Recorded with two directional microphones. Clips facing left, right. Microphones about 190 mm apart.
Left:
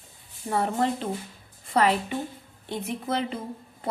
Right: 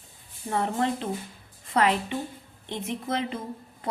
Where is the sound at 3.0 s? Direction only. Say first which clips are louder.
Left 1 dB; 30° left (ahead or behind).